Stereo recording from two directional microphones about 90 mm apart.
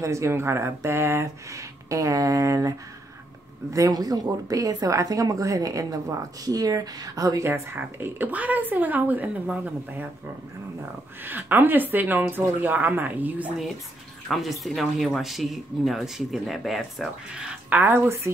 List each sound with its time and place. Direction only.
0.0 s a woman's voice: 35° right (ahead or behind)
3.7 s a woman's voice: 40° right (ahead or behind)
7.4 s a woman's voice: 25° right (ahead or behind)
11.2 s a woman's voice: 20° right (ahead or behind)
14.2 s speech: centre (ahead or behind); by 18.3 s 30° right (ahead or behind)